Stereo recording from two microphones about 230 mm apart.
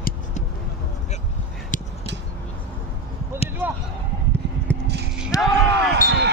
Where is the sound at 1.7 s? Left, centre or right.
Left.